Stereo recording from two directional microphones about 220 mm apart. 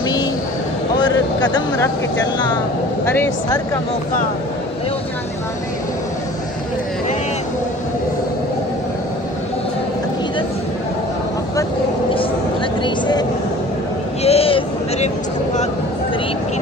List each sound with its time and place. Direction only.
1.0 s speech: 20° left (ahead or behind)
3.1 s speech: 15° left (ahead or behind)
12.8 s speech: 20° left (ahead or behind)
14.2 s a sound: 25° left (ahead or behind)